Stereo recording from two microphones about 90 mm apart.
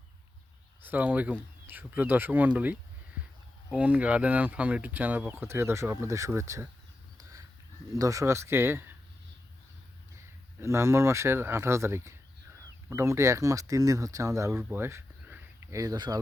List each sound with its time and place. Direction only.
0.8 s speech: 20° right (ahead or behind)
3.8 s speech: 15° right (ahead or behind); by 6.7 s 35° right (ahead or behind)
7.2 s a sound: 40° right (ahead or behind)
7.9 s speech: 40° right (ahead or behind)
10.6 s speech: 30° right (ahead or behind)
14.6 s a sound: 25° right (ahead or behind); by 16.1 s 45° right (ahead or behind)